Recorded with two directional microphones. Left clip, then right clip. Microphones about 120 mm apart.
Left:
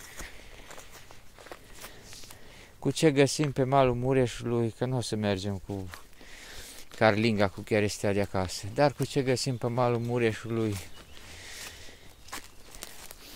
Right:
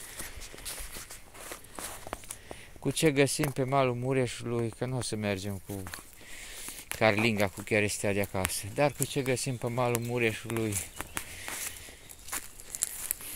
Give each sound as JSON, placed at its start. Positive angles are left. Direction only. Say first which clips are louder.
{"t": 2.8, "sound": "speech", "louder": "left 2 dB", "side_deg": 40}
{"t": 9.0, "sound": "speech", "louder": "left 3 dB", "side_deg": 50}